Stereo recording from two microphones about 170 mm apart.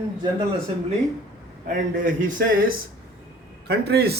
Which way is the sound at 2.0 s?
55° right (ahead or behind).